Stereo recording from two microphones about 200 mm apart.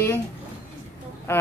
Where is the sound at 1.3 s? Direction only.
10° left (ahead or behind).